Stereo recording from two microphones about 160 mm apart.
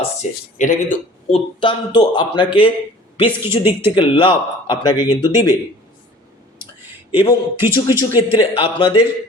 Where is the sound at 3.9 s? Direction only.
30° left (ahead or behind).